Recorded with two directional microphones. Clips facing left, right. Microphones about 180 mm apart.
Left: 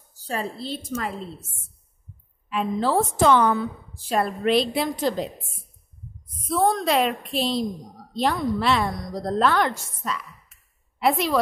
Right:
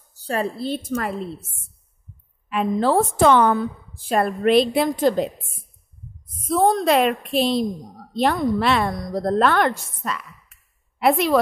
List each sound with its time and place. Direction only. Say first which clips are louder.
0.3 s a woman's voice: right 5 dB; 60° right (ahead or behind)
2.5 s a woman's voice: right 4 dB; 55° right (ahead or behind)
6.4 s a woman's voice: right 3 dB; 40° right (ahead or behind)
6.8 s a woman's voice: right 4 dB; 55° right (ahead or behind)